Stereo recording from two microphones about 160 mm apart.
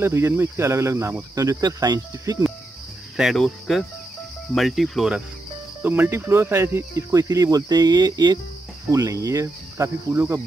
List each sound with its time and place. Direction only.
0.0 s speech: 15° right (ahead or behind)
3.2 s speech: centre (ahead or behind)
5.8 s speech: 15° right (ahead or behind)